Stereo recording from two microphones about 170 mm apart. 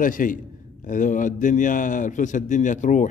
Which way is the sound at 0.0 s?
50° left (ahead or behind).